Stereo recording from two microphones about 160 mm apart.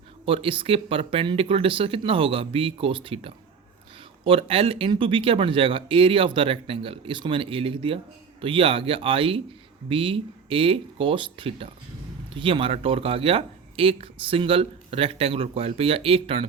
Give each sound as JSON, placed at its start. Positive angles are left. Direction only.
{"t": 0.3, "sound": "speech", "side_deg": -35}